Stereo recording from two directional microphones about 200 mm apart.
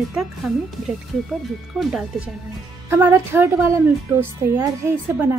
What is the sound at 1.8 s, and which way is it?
Speech, centre (ahead or behind).